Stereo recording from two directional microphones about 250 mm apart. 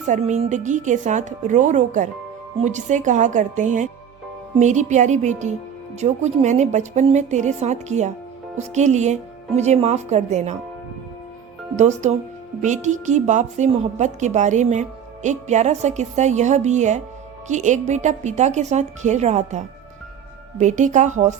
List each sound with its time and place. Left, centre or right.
0.1 s a woman's voice: right
11.8 s a woman's voice: right